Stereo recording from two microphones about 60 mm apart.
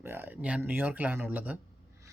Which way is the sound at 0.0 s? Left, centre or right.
Right.